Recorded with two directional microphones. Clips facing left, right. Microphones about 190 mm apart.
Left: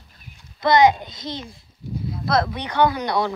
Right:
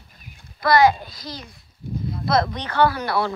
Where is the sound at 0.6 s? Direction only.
20° left (ahead or behind).